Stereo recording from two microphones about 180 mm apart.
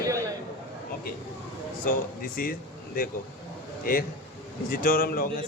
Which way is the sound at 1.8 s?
50° left (ahead or behind).